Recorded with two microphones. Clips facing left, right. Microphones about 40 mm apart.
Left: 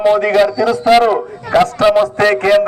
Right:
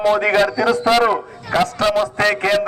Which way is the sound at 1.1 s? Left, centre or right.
Centre.